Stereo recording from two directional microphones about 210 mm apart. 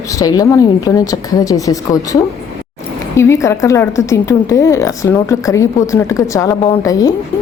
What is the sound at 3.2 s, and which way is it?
Speech, 15° left (ahead or behind).